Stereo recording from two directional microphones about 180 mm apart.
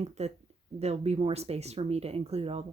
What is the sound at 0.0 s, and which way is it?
Speech, 40° right (ahead or behind).